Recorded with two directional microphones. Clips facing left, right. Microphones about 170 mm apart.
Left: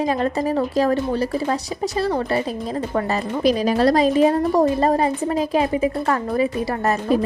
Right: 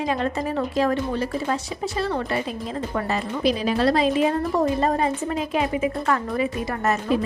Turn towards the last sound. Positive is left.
turn(degrees=40)  # may be behind; listen again after turning